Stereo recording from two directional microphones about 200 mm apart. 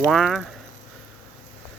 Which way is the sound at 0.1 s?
Centre (ahead or behind).